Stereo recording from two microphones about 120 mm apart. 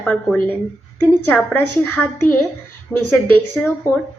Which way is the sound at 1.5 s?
15° left (ahead or behind).